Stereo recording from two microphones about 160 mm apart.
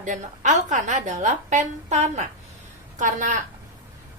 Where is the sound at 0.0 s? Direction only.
50° right (ahead or behind).